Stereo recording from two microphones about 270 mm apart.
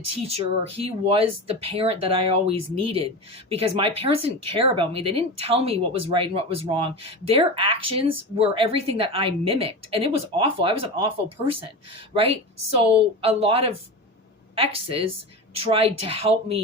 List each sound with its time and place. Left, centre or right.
0.1 s a woman's voice: right
12.1 s a woman's voice: right